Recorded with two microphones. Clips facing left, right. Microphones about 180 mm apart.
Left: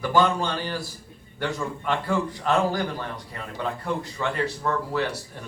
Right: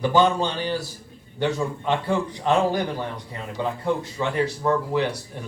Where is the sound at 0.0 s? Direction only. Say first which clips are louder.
Right 2 dB; 20° right (ahead or behind).